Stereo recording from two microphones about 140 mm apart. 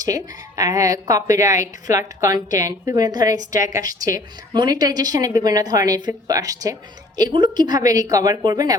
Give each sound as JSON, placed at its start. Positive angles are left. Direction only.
{"t": 0.0, "sound": "a woman's voice", "side_deg": -25}